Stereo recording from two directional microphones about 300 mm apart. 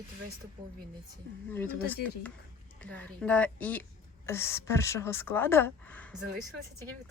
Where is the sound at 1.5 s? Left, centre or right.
Centre.